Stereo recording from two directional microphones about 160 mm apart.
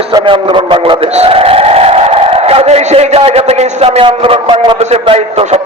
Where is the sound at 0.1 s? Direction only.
30° right (ahead or behind).